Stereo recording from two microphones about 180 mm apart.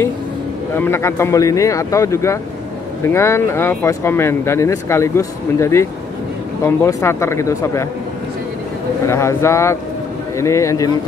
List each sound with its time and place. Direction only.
0.7 s speech: 15° left (ahead or behind)
9.0 s speech: 15° left (ahead or behind)